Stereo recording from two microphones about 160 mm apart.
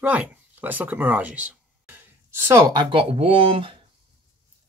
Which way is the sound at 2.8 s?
35° right (ahead or behind).